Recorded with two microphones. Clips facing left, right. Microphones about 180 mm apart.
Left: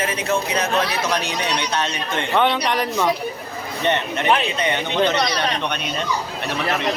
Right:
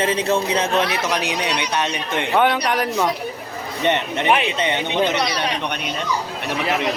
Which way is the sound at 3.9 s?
20° right (ahead or behind).